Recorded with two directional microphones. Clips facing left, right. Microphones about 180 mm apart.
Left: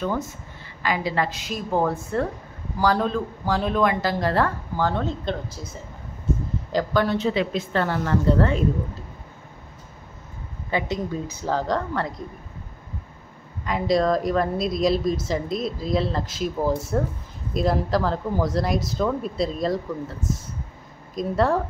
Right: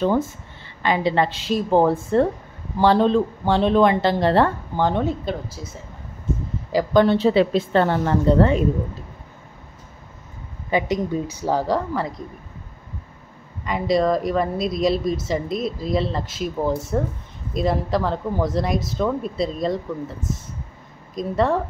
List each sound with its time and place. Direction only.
0.8 s speech: 25° right (ahead or behind)
5.2 s a woman's voice: 5° right (ahead or behind)
7.0 s speech: 30° right (ahead or behind)
10.7 s speech: 15° right (ahead or behind)
13.7 s a woman's voice: centre (ahead or behind)